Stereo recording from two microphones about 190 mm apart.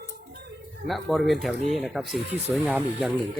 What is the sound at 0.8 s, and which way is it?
Speech, centre (ahead or behind).